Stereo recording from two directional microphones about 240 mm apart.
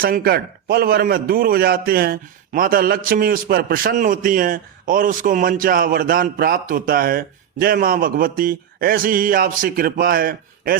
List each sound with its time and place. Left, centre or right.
0.0 s a man's voice: right